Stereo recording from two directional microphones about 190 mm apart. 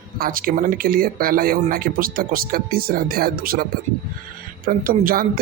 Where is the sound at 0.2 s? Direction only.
50° right (ahead or behind).